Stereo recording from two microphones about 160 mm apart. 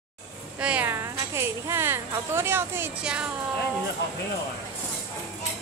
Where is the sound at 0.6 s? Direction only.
10° right (ahead or behind).